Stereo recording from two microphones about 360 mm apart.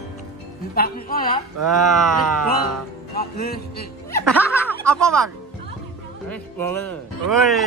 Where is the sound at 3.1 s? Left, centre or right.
Left.